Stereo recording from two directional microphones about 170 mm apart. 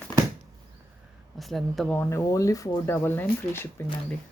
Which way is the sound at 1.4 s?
Centre (ahead or behind).